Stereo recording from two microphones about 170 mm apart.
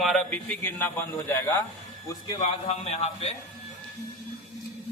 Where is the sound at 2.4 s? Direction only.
40° left (ahead or behind).